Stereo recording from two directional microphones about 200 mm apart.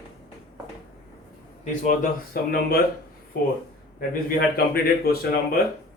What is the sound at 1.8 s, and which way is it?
Speech, 40° left (ahead or behind).